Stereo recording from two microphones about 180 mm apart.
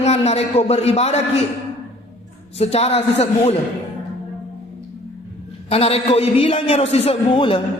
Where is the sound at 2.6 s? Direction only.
35° left (ahead or behind).